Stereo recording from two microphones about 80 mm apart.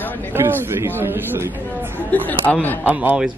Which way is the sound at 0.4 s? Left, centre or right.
Right.